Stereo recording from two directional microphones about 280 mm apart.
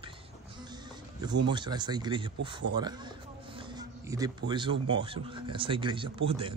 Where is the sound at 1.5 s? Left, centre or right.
Centre.